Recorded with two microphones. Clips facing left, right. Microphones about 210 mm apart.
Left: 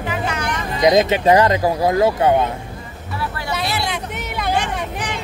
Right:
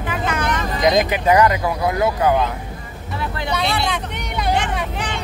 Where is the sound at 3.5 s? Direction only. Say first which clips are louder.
Right 2 dB; 5° left (ahead or behind).